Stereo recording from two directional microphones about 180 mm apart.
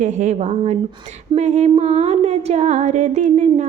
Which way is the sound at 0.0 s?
40° right (ahead or behind).